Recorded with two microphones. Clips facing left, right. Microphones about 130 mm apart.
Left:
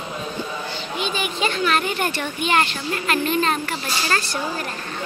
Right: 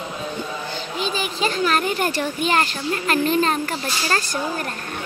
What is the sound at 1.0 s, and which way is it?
Speech, 35° right (ahead or behind).